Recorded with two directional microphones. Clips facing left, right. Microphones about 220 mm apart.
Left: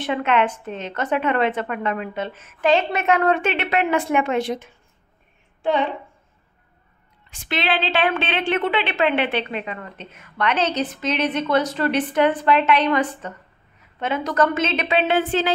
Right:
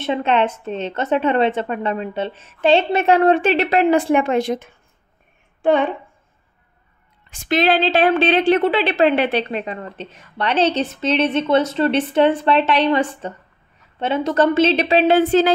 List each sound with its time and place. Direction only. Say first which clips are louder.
0.0 s a woman's voice: right 2 dB; 25° right (ahead or behind); by 5.9 s 50° right (ahead or behind)
7.2 s a woman's voice: right 7 dB; 45° right (ahead or behind)